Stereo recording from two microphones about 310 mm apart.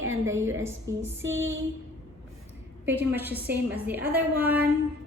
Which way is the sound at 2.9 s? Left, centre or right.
Centre.